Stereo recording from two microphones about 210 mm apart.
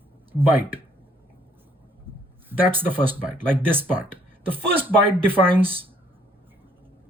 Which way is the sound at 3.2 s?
25° right (ahead or behind).